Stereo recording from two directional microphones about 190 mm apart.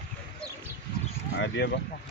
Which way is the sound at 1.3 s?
70° left (ahead or behind).